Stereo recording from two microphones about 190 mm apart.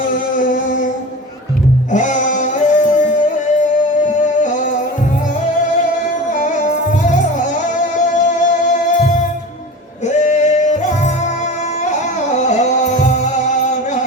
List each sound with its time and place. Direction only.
0.1 s a sound: 45° left (ahead or behind)
1.9 s music: 40° left (ahead or behind)
7.9 s music: 40° left (ahead or behind)
10.1 s music: 40° left (ahead or behind)
12.5 s music: 40° left (ahead or behind)